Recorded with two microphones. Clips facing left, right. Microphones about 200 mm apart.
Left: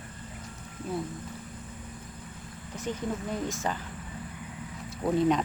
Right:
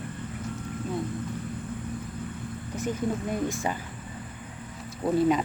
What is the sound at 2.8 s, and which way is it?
Speech, 10° right (ahead or behind).